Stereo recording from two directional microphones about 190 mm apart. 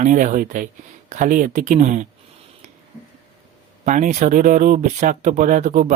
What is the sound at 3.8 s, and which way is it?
Speech, 40° right (ahead or behind).